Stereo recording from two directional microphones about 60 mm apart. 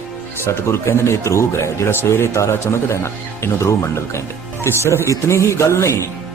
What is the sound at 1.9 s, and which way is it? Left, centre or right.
A man's voice, left.